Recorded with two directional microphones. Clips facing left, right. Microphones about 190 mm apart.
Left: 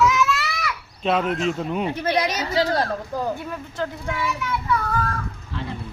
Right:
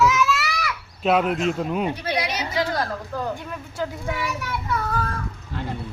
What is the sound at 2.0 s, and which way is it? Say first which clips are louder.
Children playing: left 4 dB; 45° left (ahead or behind).